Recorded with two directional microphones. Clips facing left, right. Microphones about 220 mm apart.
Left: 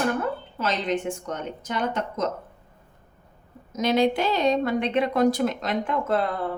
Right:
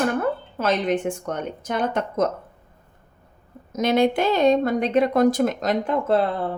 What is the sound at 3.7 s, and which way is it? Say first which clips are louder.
A woman's voice: right 2 dB; 50° right (ahead or behind).